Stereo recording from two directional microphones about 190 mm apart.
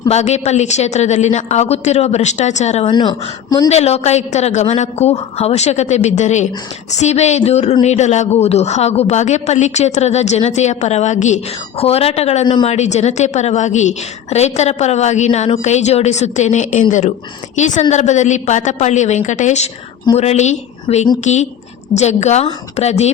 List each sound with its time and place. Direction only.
0.1 s a woman's voice: 35° left (ahead or behind)
2.9 s speech: 25° left (ahead or behind)
3.7 s a woman's voice: 35° left (ahead or behind)